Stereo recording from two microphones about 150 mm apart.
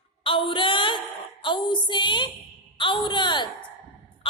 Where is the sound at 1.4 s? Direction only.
30° left (ahead or behind).